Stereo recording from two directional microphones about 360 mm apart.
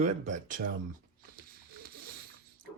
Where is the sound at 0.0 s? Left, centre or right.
Centre.